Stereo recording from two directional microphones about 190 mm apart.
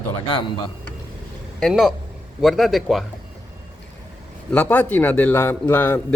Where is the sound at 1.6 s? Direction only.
Centre (ahead or behind).